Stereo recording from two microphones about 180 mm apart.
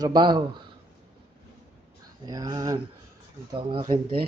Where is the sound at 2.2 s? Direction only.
20° right (ahead or behind).